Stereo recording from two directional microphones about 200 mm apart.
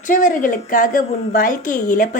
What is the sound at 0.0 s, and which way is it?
A woman's voice, 40° left (ahead or behind).